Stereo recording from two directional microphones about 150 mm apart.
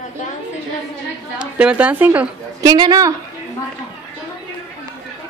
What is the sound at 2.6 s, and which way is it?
Speech, 30° right (ahead or behind).